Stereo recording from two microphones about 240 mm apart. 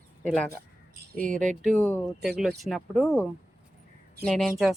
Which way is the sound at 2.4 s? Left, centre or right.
Centre.